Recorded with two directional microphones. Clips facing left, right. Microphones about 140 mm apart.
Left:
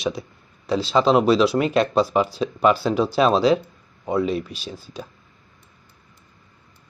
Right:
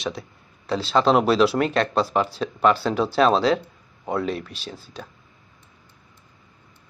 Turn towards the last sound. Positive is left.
turn(degrees=0)  # may be behind; listen again after turning